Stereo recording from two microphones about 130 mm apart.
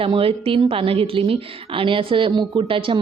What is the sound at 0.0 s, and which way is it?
A woman's voice, 45° right (ahead or behind).